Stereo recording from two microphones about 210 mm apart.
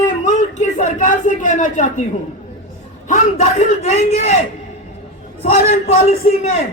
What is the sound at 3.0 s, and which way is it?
A man's voice, 30° left (ahead or behind).